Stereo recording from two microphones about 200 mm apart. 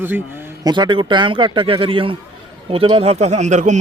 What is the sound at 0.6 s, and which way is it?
A man's voice, 20° right (ahead or behind).